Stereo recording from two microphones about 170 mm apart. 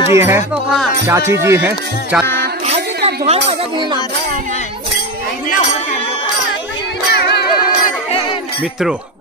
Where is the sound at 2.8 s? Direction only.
75° right (ahead or behind).